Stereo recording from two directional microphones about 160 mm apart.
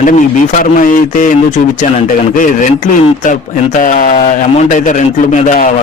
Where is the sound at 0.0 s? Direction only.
55° left (ahead or behind).